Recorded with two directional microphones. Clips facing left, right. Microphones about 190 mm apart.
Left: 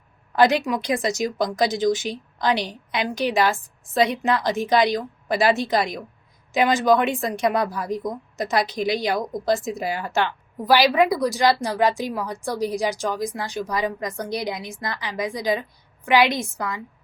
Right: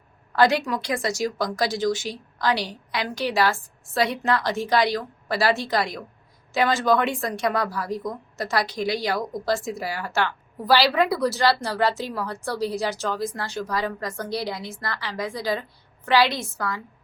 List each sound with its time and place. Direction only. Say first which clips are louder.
0.3 s a woman's voice: left 2 dB; 20° left (ahead or behind)